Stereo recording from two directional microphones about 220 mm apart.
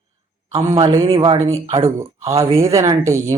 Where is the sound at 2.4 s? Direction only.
15° right (ahead or behind).